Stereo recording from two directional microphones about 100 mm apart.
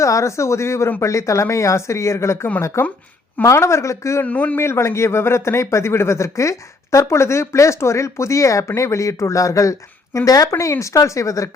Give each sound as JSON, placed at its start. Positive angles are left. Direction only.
{"t": 0.0, "sound": "a man's voice", "side_deg": 30}
{"t": 4.3, "sound": "a man's voice", "side_deg": 15}